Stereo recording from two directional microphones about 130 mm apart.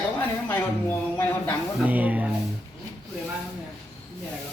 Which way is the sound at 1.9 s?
10° right (ahead or behind).